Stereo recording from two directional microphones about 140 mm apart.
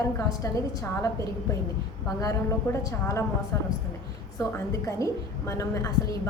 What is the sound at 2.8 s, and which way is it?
Speech, 20° left (ahead or behind).